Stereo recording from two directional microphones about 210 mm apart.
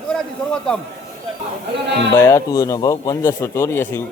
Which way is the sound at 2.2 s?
10° left (ahead or behind).